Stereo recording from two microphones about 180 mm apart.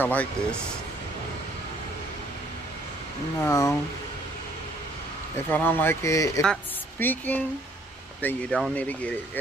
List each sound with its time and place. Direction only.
0.0 s speech: 10° left (ahead or behind)
3.4 s speech: 20° left (ahead or behind)
5.5 s speech: 10° left (ahead or behind)
6.4 s a woman's voice: 5° left (ahead or behind)